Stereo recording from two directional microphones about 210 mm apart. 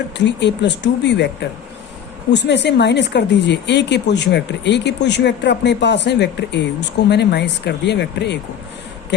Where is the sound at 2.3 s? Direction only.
55° left (ahead or behind).